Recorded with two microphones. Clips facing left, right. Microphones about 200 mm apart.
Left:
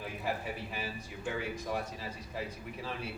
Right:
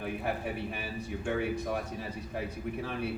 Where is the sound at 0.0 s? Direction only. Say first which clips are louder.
Right 3 dB; 60° right (ahead or behind).